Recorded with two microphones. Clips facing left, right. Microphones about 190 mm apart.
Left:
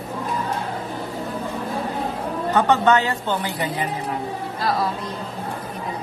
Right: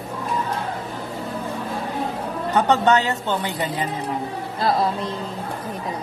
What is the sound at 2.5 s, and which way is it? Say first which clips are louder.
A woman's voice: even; 15° right (ahead or behind).